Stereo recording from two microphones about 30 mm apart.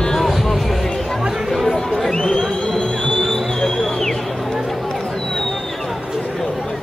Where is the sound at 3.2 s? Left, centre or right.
Centre.